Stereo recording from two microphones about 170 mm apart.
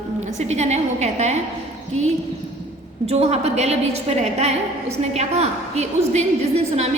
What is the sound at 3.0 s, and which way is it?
A woman's voice, 40° right (ahead or behind).